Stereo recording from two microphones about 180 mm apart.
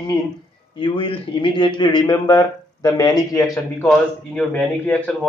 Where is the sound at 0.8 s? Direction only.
30° left (ahead or behind).